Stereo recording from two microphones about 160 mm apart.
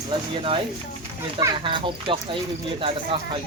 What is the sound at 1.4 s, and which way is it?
Speech, 30° right (ahead or behind).